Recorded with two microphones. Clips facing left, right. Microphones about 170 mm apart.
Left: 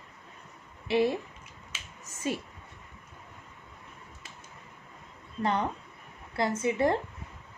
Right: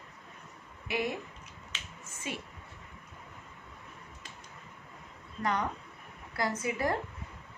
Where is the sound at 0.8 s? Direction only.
30° left (ahead or behind).